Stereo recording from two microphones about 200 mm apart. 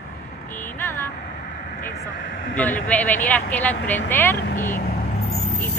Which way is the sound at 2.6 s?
10° left (ahead or behind).